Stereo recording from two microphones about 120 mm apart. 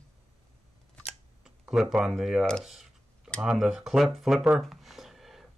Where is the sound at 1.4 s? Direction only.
5° right (ahead or behind).